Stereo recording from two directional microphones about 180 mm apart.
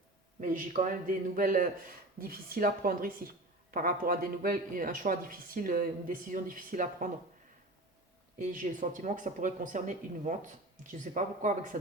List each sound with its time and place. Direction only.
0.3 s speech: 50° right (ahead or behind)
8.4 s speech: 45° right (ahead or behind)